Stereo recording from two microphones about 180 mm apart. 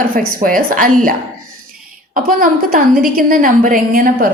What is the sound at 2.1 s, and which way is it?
Speech, 50° right (ahead or behind).